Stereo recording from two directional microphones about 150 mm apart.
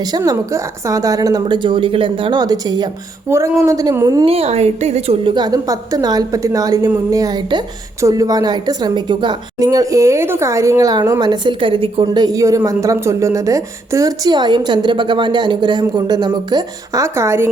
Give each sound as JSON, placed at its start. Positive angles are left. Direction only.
{"t": 0.0, "sound": "a woman's voice", "side_deg": -25}
{"t": 3.2, "sound": "a woman's voice", "side_deg": -15}
{"t": 4.3, "sound": "a woman's voice", "side_deg": -45}
{"t": 12.0, "sound": "a woman's voice", "side_deg": -25}